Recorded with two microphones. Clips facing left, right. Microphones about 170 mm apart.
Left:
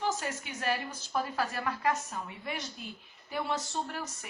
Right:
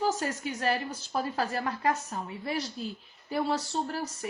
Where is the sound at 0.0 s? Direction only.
40° right (ahead or behind).